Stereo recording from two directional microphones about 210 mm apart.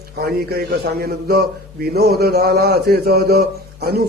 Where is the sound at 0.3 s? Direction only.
45° right (ahead or behind).